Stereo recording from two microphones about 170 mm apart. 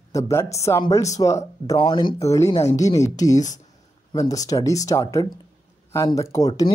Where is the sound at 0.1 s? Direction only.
15° left (ahead or behind).